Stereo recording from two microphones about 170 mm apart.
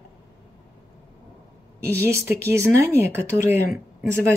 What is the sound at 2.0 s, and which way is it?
Speech, 15° right (ahead or behind).